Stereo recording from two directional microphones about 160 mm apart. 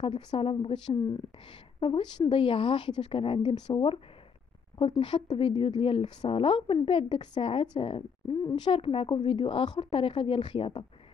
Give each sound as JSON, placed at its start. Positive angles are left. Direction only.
{"t": 0.0, "sound": "a woman's voice", "side_deg": 30}